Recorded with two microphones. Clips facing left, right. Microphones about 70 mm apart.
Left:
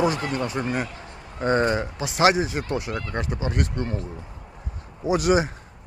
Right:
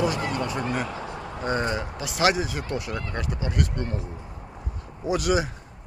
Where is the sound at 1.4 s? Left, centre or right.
Left.